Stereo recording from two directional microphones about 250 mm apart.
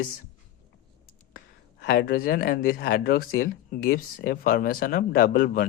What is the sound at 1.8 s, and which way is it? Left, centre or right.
Speech, left.